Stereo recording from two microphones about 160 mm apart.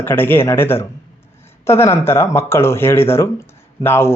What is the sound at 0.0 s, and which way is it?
Speech, 15° left (ahead or behind).